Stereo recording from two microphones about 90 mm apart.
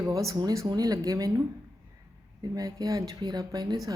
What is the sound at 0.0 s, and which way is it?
A woman's voice, 35° right (ahead or behind).